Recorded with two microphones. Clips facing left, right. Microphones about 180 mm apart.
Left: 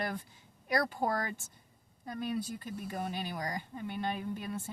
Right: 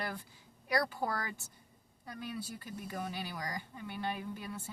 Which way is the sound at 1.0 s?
40° left (ahead or behind).